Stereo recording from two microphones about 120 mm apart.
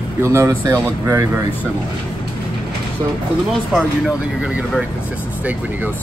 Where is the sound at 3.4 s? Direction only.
5° right (ahead or behind).